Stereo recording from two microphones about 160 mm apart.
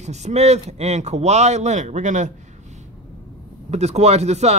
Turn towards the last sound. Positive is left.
turn(degrees=-45)  # may be behind; listen again after turning